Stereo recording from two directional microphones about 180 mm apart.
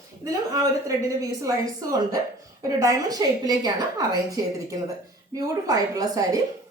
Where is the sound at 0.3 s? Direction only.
20° right (ahead or behind).